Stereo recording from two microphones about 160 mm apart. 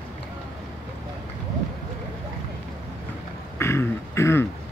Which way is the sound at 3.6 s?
15° left (ahead or behind).